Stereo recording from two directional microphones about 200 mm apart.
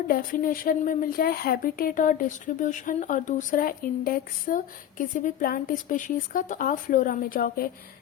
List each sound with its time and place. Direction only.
0.1 s a woman's voice: 45° left (ahead or behind)